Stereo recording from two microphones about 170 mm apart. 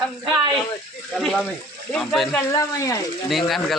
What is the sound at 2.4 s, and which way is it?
Speech, 20° left (ahead or behind).